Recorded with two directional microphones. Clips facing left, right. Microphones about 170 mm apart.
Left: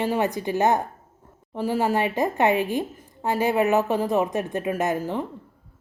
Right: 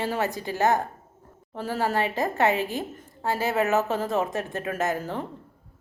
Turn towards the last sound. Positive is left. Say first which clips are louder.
# left 3 dB
turn(degrees=15)  # may be behind; listen again after turning